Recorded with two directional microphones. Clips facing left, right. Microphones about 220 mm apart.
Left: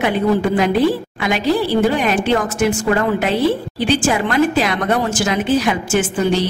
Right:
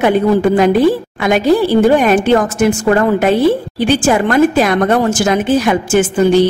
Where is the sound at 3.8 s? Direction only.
50° right (ahead or behind).